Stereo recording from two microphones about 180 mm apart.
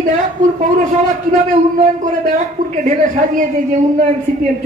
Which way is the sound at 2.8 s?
45° right (ahead or behind).